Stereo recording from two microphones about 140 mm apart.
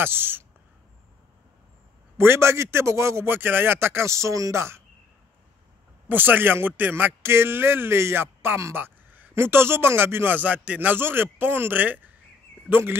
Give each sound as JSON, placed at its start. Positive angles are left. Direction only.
{"t": 0.0, "sound": "a man's voice", "side_deg": -15}
{"t": 2.1, "sound": "a man's voice", "side_deg": -20}
{"t": 6.0, "sound": "a man's voice", "side_deg": -15}